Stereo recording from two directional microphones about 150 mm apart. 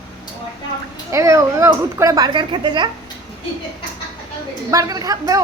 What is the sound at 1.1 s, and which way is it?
Speech, 20° right (ahead or behind).